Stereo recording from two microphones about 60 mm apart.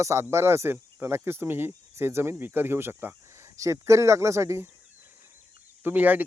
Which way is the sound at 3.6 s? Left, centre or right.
Right.